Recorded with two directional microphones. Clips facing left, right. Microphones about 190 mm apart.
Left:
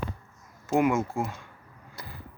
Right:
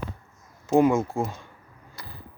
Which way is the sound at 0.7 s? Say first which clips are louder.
Right 4 dB; 30° right (ahead or behind).